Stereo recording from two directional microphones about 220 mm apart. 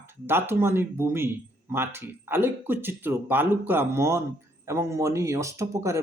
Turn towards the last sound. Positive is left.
turn(degrees=-15)  # may be behind; listen again after turning